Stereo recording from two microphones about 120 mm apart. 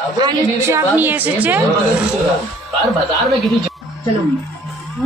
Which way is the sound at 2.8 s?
Centre (ahead or behind).